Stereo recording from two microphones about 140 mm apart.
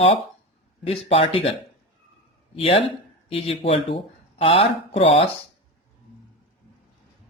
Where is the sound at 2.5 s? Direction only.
40° left (ahead or behind).